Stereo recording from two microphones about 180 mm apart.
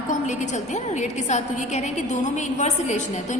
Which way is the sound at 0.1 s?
40° left (ahead or behind).